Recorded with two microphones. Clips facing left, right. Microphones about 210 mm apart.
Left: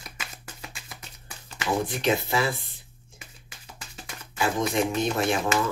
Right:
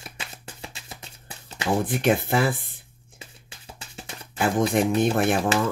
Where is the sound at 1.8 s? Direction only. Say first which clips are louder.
Right 3 dB; 55° right (ahead or behind).